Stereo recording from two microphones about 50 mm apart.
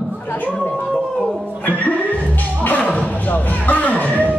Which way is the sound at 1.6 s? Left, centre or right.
Left.